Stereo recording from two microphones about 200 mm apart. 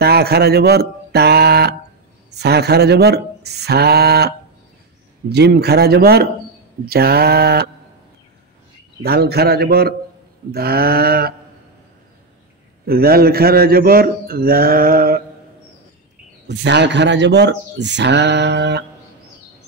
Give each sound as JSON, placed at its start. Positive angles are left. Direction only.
{"t": 0.0, "sound": "a man's voice", "side_deg": -50}
{"t": 5.3, "sound": "a man's voice", "side_deg": -55}
{"t": 9.0, "sound": "a man's voice", "side_deg": -50}
{"t": 12.8, "sound": "a man's voice", "side_deg": -50}
{"t": 16.4, "sound": "speech", "side_deg": -60}